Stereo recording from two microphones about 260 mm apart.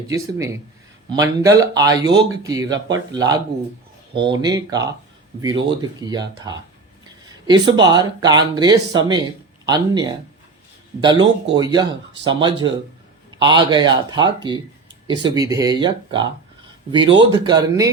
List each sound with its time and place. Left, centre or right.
0.1 s speech: centre
7.4 s speech: centre